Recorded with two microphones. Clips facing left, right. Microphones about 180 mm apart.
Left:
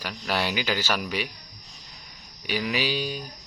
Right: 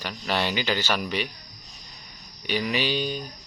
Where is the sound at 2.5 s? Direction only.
5° left (ahead or behind).